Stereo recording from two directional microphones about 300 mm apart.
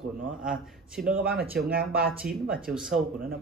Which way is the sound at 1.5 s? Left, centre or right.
Right.